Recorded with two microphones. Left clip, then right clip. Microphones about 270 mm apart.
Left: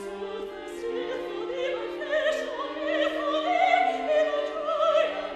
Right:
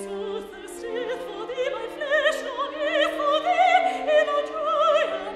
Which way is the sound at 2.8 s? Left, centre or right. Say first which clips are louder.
Right 4 dB; right.